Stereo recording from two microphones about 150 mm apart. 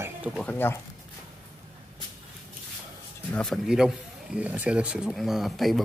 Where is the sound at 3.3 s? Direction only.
5° left (ahead or behind).